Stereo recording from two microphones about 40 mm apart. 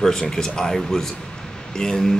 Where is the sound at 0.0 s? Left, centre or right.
Centre.